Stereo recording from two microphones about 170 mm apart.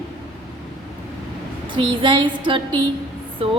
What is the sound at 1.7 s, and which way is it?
Speech, 30° right (ahead or behind).